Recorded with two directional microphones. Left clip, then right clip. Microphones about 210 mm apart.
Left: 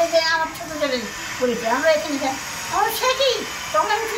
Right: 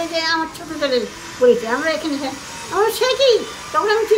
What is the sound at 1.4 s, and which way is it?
Speech, 20° right (ahead or behind).